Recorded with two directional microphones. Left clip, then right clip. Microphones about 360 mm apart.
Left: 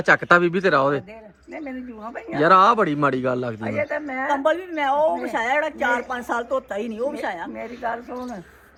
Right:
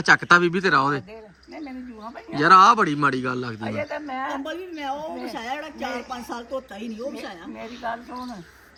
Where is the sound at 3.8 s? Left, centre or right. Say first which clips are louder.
Left 5 dB; right.